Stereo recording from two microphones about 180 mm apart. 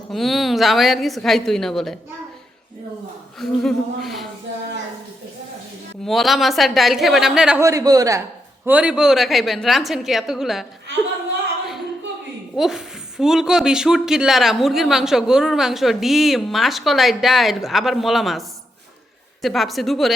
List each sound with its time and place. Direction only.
0.1 s a woman's voice: centre (ahead or behind)
3.3 s a woman's voice: centre (ahead or behind)
6.1 s a woman's voice: centre (ahead or behind)
7.6 s a man's voice: 20° right (ahead or behind)
8.6 s a woman's voice: 5° right (ahead or behind)
12.5 s a woman's voice: centre (ahead or behind)